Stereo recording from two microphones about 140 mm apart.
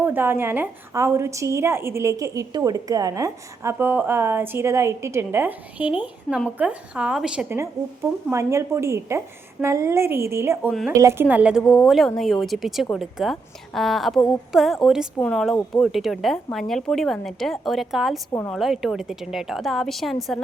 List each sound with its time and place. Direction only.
0.0 s a woman's voice: 15° right (ahead or behind)
8.3 s a woman's voice: 20° right (ahead or behind); by 20.1 s centre (ahead or behind)